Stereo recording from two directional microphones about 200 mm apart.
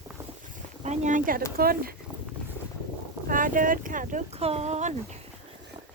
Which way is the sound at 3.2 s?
40° right (ahead or behind).